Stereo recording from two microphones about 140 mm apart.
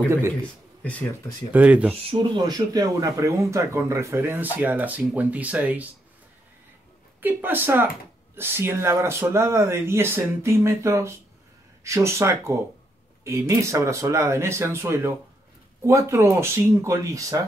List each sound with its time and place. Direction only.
1.5 s speech: 10° right (ahead or behind)
2.0 s speech: 35° right (ahead or behind); by 5.9 s 10° right (ahead or behind)
7.2 s speech: 15° right (ahead or behind)